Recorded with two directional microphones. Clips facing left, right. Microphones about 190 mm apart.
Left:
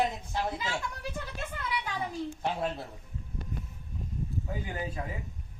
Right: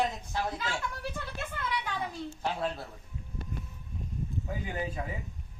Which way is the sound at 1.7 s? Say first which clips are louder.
Left 2 dB; 10° left (ahead or behind).